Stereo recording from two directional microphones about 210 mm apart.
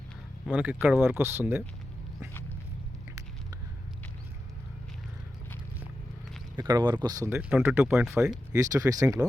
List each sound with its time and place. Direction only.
0.4 s speech: 5° right (ahead or behind)
6.6 s speech: 20° right (ahead or behind); by 8.4 s 5° right (ahead or behind)
8.5 s speech: 15° right (ahead or behind)